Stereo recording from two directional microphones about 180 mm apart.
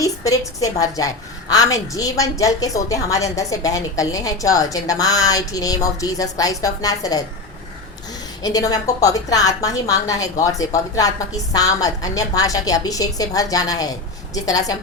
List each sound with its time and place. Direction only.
0.0 s a woman's voice: 20° left (ahead or behind)
8.4 s a woman's voice: 20° left (ahead or behind)